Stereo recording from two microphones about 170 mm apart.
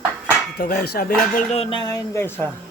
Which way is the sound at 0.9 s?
60° left (ahead or behind).